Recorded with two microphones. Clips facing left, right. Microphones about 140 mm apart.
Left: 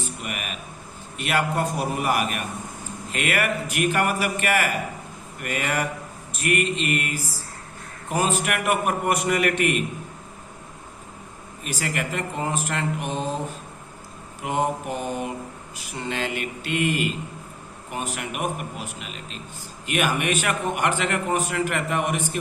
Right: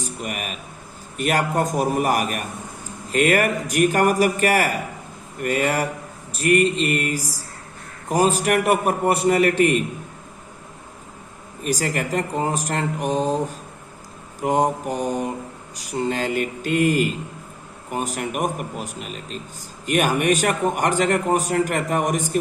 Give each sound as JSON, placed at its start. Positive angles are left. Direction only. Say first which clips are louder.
{"t": 0.0, "sound": "a sound", "louder": "right 3 dB", "side_deg": -40}
{"t": 1.1, "sound": "a man's voice", "louder": "right 3 dB", "side_deg": -40}
{"t": 11.6, "sound": "a man's voice", "louder": "right 5 dB", "side_deg": -35}